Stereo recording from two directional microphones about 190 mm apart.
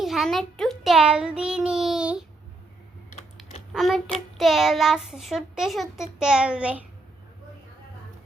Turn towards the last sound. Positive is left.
turn(degrees=-5)  # may be behind; listen again after turning